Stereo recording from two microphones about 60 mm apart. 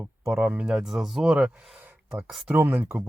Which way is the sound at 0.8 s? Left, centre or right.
Centre.